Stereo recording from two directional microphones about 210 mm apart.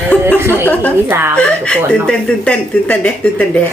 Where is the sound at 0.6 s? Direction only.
10° left (ahead or behind).